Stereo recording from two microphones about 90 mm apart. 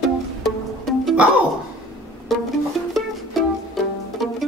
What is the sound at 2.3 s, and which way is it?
Music, centre (ahead or behind).